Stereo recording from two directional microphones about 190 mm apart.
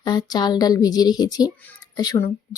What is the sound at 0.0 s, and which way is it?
Speech, 20° left (ahead or behind).